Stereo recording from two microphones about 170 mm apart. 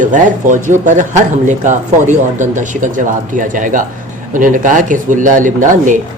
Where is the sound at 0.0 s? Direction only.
50° right (ahead or behind).